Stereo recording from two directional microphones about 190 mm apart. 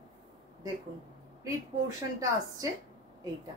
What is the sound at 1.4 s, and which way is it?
A woman's voice, 20° right (ahead or behind).